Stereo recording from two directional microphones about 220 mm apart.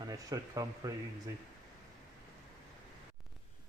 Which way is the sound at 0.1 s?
15° right (ahead or behind).